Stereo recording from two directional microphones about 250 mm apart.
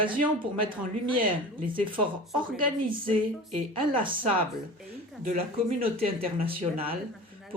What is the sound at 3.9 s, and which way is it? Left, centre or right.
Speech, centre.